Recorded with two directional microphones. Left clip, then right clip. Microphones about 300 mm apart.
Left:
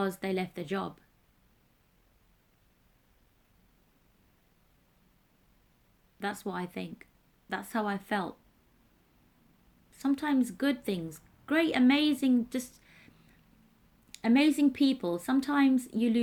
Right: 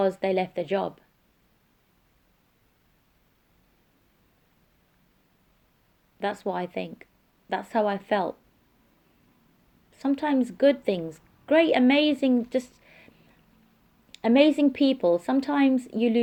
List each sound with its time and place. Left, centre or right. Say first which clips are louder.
0.0 s a woman's voice: right 9 dB; left
6.1 s a woman's voice: right 7 dB; left
9.9 s a woman's voice: right 4 dB; left
14.1 s a woman's voice: right 7 dB; left